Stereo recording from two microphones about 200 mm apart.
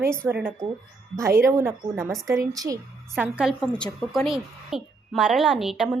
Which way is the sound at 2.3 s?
15° right (ahead or behind).